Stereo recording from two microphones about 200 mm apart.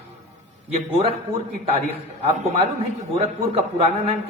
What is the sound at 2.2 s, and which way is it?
Speech, 30° right (ahead or behind).